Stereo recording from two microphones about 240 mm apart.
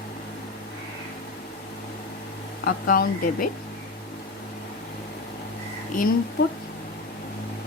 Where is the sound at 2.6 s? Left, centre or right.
Left.